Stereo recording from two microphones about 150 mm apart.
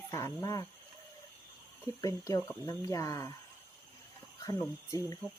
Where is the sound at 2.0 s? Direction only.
20° left (ahead or behind).